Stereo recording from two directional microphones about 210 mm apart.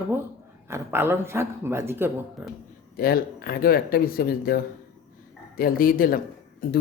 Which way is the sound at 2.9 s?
45° left (ahead or behind).